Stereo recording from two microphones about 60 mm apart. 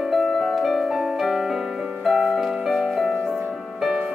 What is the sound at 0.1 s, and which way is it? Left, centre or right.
Piano, centre.